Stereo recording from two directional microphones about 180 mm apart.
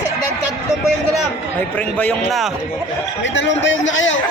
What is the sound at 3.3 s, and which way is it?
Speech, 90° left.